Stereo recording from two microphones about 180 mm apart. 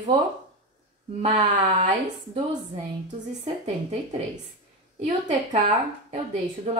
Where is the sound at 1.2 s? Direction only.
30° right (ahead or behind).